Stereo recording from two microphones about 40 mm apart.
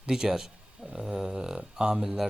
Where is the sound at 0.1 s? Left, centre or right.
Centre.